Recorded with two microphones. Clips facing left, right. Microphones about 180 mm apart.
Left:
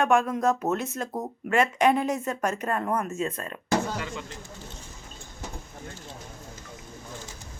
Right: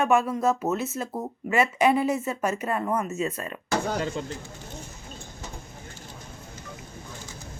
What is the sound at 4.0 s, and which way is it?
Speech, 35° right (ahead or behind).